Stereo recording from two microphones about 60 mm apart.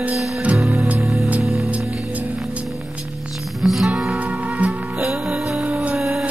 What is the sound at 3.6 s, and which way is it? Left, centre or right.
Music, centre.